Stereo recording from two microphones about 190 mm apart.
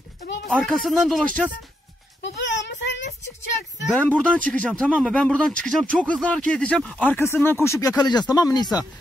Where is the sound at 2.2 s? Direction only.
70° left (ahead or behind).